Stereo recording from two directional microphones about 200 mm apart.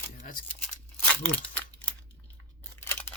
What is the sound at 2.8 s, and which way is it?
Scissors, 10° left (ahead or behind).